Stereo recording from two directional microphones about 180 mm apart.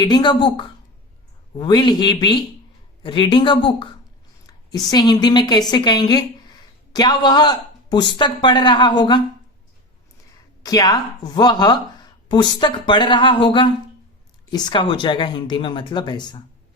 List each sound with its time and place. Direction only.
0.0 s a woman's voice: 25° left (ahead or behind)
10.6 s speech: 20° left (ahead or behind)